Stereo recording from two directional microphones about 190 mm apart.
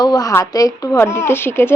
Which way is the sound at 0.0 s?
20° left (ahead or behind).